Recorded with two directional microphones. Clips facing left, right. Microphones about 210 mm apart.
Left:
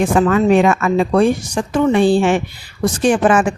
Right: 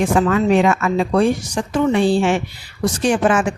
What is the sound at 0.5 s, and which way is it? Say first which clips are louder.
Speech: left 2 dB; 50° left (ahead or behind).